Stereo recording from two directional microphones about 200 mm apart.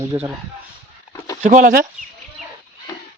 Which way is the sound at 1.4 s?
40° right (ahead or behind).